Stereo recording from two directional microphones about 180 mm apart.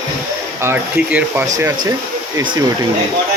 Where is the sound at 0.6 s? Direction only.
10° right (ahead or behind).